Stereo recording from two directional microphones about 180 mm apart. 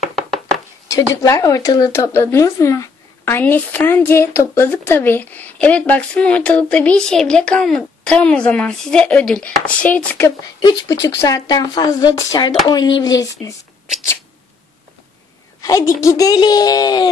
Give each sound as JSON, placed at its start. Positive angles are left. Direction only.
{"t": 0.0, "sound": "chopping", "side_deg": 0}
{"t": 0.8, "sound": "speech", "side_deg": 20}
{"t": 15.6, "sound": "speech", "side_deg": 15}